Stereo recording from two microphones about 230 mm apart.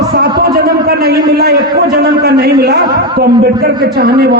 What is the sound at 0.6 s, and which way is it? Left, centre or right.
Speech, right.